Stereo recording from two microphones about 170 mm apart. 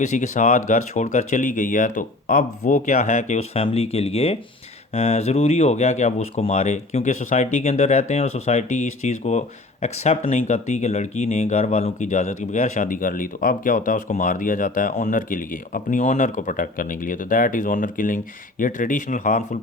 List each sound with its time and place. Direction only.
0.0 s speech: 45° left (ahead or behind)